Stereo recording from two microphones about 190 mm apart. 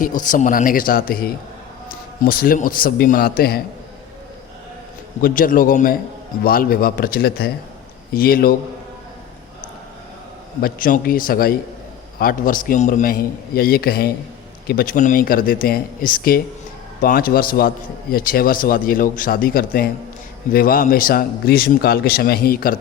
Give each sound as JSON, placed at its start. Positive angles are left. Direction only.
{"t": 0.0, "sound": "a man's voice", "side_deg": 45}
{"t": 2.2, "sound": "a man's voice", "side_deg": 50}
{"t": 5.2, "sound": "a man's voice", "side_deg": 45}
{"t": 10.6, "sound": "a man's voice", "side_deg": 45}